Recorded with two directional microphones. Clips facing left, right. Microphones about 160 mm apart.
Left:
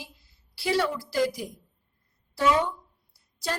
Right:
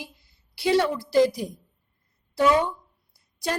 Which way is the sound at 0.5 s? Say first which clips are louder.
Right 4 dB; 25° right (ahead or behind).